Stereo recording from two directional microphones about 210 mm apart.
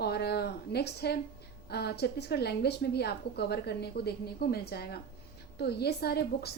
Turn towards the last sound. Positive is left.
turn(degrees=50)  # may be behind; listen again after turning